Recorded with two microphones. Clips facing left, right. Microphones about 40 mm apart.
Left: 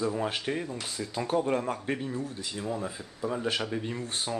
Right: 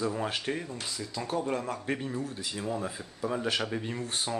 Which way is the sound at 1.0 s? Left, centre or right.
Left.